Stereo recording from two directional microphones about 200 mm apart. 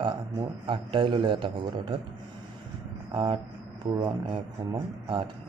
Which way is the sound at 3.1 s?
25° right (ahead or behind).